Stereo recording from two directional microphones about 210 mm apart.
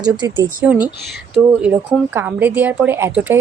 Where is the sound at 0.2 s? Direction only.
20° right (ahead or behind).